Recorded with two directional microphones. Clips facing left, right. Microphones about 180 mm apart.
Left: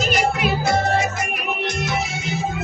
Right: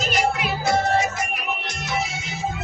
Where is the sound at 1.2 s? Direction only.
65° left (ahead or behind).